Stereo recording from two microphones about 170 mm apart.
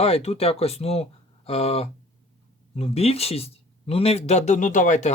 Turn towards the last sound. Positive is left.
turn(degrees=45)  # may be behind; listen again after turning